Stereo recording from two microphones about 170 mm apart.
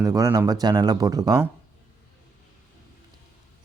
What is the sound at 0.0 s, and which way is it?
Speech, 20° right (ahead or behind).